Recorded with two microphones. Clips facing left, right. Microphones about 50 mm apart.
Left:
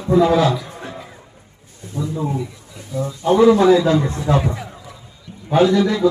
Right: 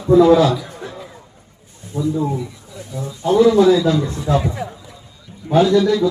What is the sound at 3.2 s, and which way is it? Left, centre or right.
A man's voice, left.